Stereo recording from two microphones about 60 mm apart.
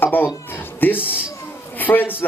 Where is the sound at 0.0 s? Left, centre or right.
Left.